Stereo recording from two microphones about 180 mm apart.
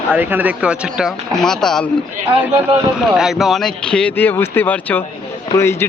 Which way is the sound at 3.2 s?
Centre (ahead or behind).